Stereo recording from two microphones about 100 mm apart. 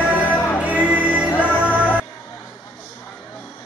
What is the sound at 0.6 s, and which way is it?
Music, 15° right (ahead or behind).